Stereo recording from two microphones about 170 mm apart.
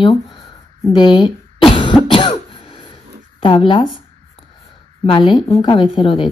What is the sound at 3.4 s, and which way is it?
Speech, 30° left (ahead or behind).